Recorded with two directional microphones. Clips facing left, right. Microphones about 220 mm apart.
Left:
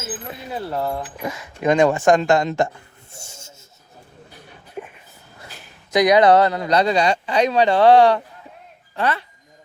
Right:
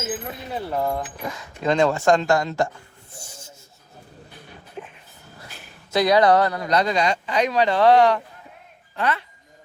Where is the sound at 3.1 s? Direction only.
25° left (ahead or behind).